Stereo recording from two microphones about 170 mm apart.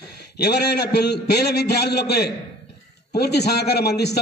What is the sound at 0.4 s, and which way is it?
A man's voice, 75° left (ahead or behind).